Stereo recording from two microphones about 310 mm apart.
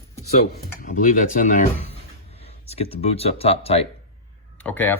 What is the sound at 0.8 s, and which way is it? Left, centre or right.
Speech, left.